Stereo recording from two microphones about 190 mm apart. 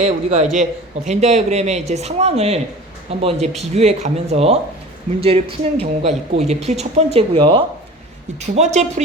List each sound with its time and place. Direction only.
0.0 s speech: 35° right (ahead or behind)